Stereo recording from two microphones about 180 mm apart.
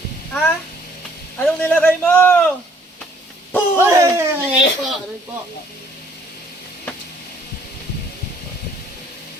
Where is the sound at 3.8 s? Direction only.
15° right (ahead or behind).